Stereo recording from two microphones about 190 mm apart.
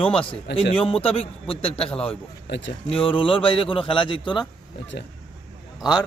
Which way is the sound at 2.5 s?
70° left (ahead or behind).